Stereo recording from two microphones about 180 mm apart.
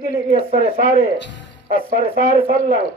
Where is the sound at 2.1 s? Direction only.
55° right (ahead or behind).